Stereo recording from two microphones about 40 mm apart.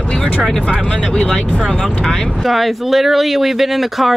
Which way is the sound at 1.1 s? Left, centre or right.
Centre.